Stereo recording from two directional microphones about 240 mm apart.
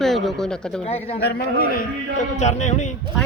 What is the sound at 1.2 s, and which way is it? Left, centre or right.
A man's voice, left.